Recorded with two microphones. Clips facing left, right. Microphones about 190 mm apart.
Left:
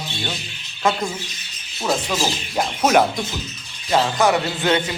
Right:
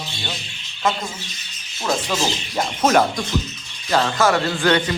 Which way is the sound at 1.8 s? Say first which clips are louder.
Even; centre (ahead or behind).